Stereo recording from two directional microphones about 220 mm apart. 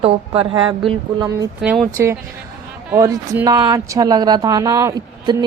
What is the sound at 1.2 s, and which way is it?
Speech, 10° right (ahead or behind).